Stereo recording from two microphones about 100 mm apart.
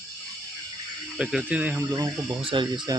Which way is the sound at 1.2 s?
10° right (ahead or behind).